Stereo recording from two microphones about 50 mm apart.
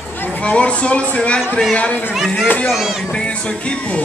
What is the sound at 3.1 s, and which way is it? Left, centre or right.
Speech, left.